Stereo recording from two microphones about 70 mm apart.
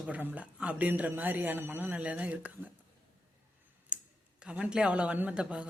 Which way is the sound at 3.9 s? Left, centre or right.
Centre.